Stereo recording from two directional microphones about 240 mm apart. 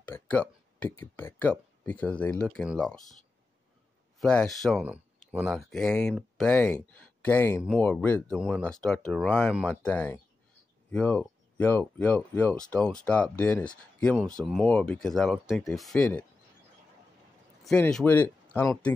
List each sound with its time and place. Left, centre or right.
0.0 s speech: centre
4.2 s speech: centre
17.6 s speech: centre